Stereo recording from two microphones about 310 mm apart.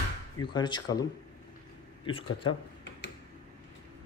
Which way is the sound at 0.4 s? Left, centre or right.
Centre.